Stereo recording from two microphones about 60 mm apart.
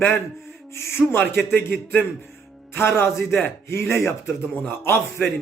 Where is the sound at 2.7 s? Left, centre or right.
Left.